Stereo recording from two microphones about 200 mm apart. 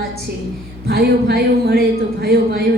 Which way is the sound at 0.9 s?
50° right (ahead or behind).